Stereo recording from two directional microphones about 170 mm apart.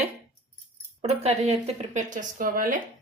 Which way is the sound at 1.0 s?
40° right (ahead or behind).